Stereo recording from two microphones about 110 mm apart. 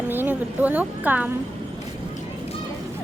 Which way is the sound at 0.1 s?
20° right (ahead or behind).